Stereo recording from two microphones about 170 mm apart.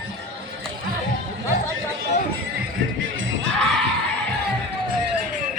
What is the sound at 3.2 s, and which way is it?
Music, 90° right.